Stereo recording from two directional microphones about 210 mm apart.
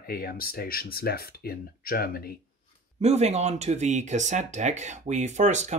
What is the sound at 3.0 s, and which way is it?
Speech, 30° right (ahead or behind).